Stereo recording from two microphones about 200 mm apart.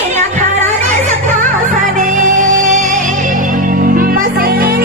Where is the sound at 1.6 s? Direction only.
40° right (ahead or behind).